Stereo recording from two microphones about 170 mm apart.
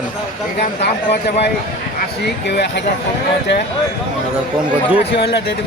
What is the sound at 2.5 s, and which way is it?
Speech, 85° left.